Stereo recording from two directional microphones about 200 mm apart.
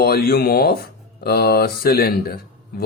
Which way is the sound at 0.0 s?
50° left (ahead or behind).